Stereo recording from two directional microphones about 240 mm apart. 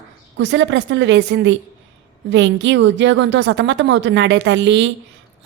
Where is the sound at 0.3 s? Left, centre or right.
Right.